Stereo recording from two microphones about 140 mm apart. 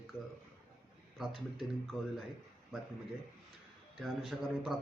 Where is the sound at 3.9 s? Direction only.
Centre (ahead or behind).